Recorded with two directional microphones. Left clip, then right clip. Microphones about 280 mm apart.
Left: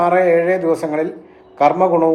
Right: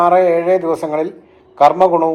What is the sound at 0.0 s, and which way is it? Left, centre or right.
A man's voice, centre.